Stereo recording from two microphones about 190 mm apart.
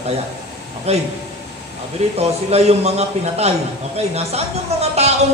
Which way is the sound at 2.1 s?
35° right (ahead or behind).